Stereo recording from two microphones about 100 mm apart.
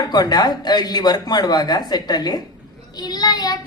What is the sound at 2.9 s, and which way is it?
Child singing, 45° left (ahead or behind).